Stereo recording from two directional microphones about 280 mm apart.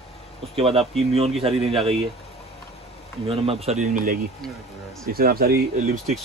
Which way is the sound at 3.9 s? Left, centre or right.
Right.